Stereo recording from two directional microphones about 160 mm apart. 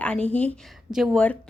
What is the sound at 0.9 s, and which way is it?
Speech, centre (ahead or behind).